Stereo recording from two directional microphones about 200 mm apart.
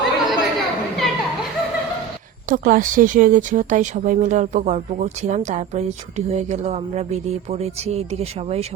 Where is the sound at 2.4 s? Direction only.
45° right (ahead or behind).